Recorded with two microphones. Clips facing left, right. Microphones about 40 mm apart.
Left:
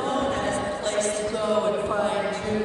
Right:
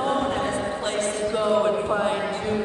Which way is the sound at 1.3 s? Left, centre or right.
Right.